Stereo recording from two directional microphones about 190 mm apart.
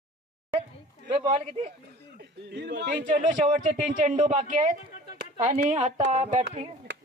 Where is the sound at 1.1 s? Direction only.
30° right (ahead or behind).